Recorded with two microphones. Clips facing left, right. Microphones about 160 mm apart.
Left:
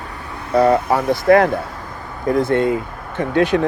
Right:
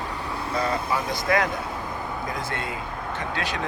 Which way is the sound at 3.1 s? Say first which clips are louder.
Left 15 dB; 60° left (ahead or behind).